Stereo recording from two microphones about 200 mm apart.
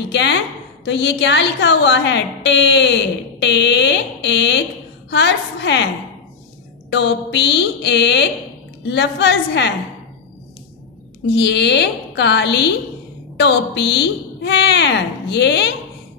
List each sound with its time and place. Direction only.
0.0 s a woman's voice: 60° left (ahead or behind)
6.9 s a woman's voice: 60° left (ahead or behind)
11.3 s a woman's voice: 60° left (ahead or behind)